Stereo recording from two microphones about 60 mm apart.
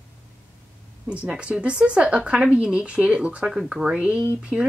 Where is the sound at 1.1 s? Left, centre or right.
Centre.